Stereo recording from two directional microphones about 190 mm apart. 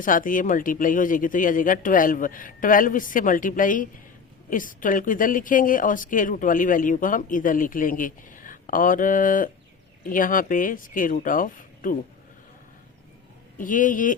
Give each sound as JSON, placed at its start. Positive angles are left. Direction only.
{"t": 0.0, "sound": "a woman's voice", "side_deg": 45}
{"t": 13.6, "sound": "a woman's voice", "side_deg": 45}